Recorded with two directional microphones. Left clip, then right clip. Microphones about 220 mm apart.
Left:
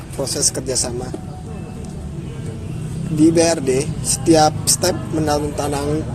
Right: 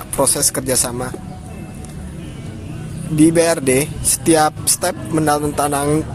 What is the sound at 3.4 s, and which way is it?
Speech, 45° right (ahead or behind).